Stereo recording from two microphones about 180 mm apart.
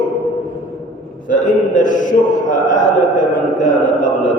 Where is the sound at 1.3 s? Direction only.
45° left (ahead or behind).